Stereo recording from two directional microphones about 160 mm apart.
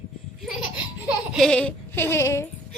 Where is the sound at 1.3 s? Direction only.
5° left (ahead or behind).